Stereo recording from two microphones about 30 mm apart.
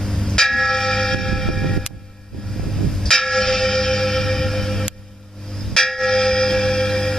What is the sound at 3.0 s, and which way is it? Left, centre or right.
Bell, centre.